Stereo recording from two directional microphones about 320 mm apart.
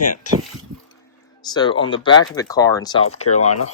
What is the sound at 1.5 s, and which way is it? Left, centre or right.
Speech, centre.